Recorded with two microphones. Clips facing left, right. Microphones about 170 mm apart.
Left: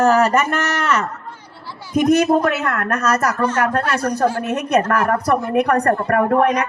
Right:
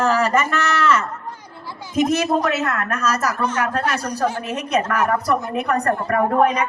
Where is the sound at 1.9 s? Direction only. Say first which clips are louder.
Left 4 dB; 50° left (ahead or behind).